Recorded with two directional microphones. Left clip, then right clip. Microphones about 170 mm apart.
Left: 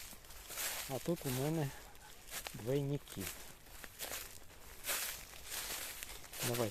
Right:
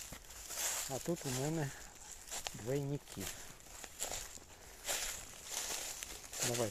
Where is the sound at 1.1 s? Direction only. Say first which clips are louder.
Left 2 dB; 15° left (ahead or behind).